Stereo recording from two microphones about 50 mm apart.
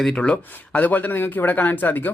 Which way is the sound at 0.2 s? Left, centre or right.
Left.